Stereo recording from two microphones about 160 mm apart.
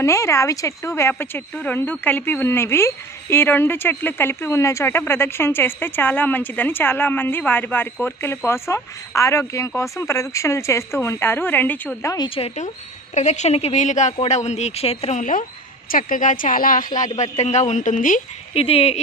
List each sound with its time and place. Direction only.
0.0 s speech: 20° left (ahead or behind)
12.4 s a woman's voice: 45° left (ahead or behind)
18.5 s speech: 35° left (ahead or behind)